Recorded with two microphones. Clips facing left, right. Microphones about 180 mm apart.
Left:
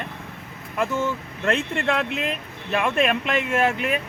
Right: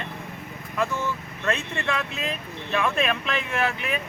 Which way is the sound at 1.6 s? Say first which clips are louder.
Left 5 dB; 55° left (ahead or behind).